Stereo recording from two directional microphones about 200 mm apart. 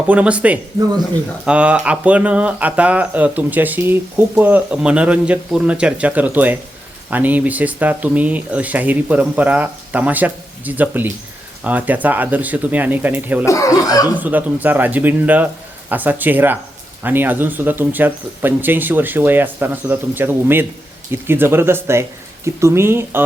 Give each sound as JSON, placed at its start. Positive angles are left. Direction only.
{"t": 0.1, "sound": "speech", "side_deg": -5}
{"t": 13.4, "sound": "speech", "side_deg": 15}
{"t": 14.2, "sound": "speech", "side_deg": -10}